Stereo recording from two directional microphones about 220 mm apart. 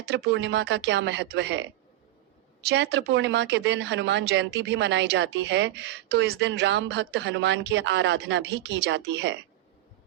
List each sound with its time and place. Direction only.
0.0 s speech: 50° right (ahead or behind)
2.6 s speech: 55° right (ahead or behind)